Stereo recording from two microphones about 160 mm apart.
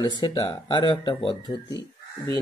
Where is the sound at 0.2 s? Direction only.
25° left (ahead or behind).